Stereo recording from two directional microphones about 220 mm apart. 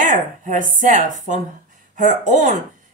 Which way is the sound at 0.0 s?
35° right (ahead or behind).